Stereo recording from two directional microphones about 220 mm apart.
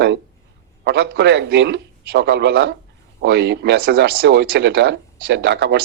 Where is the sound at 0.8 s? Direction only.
45° right (ahead or behind).